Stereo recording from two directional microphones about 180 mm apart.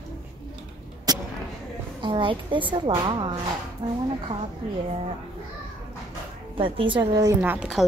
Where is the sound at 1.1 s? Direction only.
20° right (ahead or behind).